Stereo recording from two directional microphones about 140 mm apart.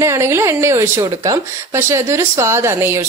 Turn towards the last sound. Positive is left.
turn(degrees=-15)  # may be behind; listen again after turning